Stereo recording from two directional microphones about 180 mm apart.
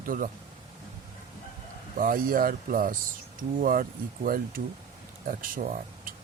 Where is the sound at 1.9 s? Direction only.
50° right (ahead or behind).